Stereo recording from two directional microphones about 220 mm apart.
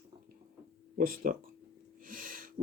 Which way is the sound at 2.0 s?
40° right (ahead or behind).